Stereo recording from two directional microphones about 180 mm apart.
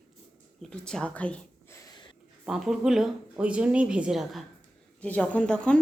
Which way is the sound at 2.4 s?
Centre (ahead or behind).